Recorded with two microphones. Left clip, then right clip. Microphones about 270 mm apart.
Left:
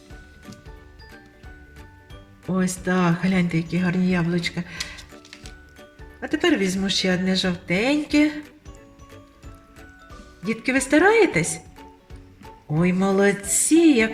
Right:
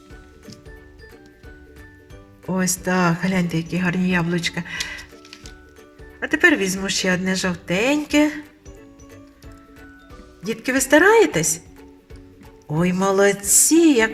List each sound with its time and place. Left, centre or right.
2.5 s speech: right
6.1 s speech: right
10.4 s speech: right
12.7 s speech: right